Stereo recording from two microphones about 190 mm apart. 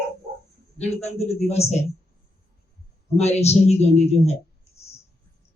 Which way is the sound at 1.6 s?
15° left (ahead or behind).